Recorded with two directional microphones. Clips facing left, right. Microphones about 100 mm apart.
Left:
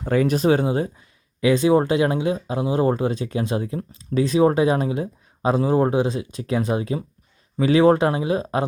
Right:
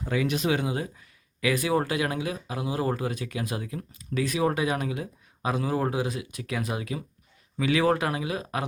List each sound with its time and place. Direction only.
0.0 s speech: 45° left (ahead or behind); by 8.6 s 30° left (ahead or behind)